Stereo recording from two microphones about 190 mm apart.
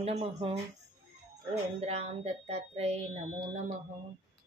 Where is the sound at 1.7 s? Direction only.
35° right (ahead or behind).